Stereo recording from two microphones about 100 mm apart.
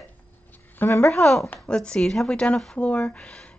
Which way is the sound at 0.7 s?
25° left (ahead or behind).